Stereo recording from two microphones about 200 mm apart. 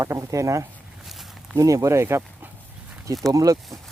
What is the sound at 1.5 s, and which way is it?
Speech, 15° right (ahead or behind).